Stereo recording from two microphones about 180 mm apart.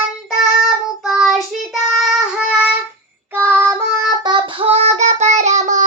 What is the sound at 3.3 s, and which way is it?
Child singing, 10° right (ahead or behind).